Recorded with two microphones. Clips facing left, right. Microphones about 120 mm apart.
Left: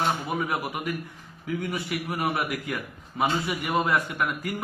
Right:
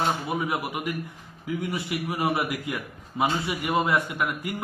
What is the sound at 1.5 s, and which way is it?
A man's voice, 25° right (ahead or behind).